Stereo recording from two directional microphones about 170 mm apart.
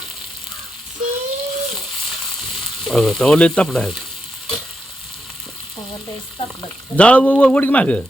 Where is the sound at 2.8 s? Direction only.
Centre (ahead or behind).